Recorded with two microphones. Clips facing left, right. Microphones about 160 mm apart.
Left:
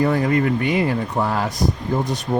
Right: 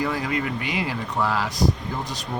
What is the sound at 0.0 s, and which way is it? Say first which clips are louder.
Speech: left 7 dB; 50° left (ahead or behind).